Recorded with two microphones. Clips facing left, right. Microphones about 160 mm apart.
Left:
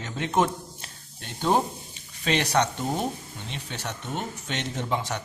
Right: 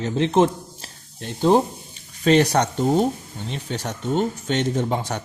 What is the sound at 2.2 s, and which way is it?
Speech, 40° right (ahead or behind).